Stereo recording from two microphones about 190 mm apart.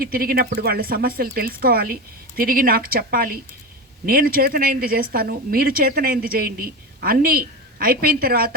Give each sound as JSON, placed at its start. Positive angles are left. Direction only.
{"t": 0.0, "sound": "speech", "side_deg": -50}